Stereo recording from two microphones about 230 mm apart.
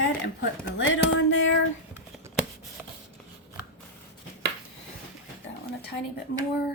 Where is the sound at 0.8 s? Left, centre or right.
Left.